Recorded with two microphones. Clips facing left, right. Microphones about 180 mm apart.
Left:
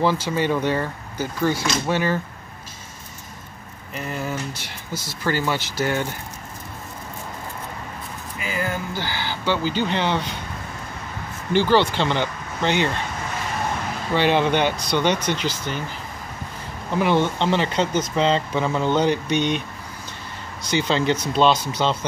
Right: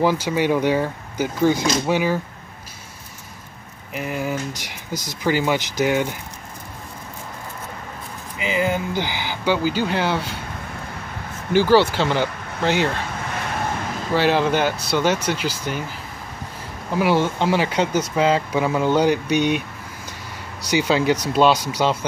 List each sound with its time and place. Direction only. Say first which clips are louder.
0.0 s speech: right 2 dB; 10° right (ahead or behind)
3.9 s speech: right 3 dB; 10° right (ahead or behind)
8.4 s speech: right 5 dB; 20° right (ahead or behind)
11.5 s speech: right 3 dB; 10° right (ahead or behind)
14.1 s speech: right 1 dB; 5° right (ahead or behind)
16.9 s speech: right 1 dB; 5° right (ahead or behind)
20.7 s speech: right 2 dB; 10° right (ahead or behind)